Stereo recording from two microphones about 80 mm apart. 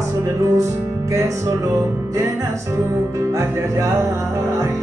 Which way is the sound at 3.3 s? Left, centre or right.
Right.